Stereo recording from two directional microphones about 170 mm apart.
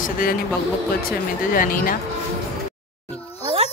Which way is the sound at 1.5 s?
55° left (ahead or behind).